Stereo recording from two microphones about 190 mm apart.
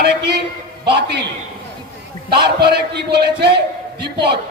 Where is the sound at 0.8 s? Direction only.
60° right (ahead or behind).